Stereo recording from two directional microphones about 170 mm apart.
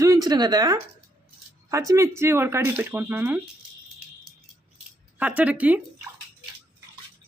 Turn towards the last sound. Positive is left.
turn(degrees=-10)  # may be behind; listen again after turning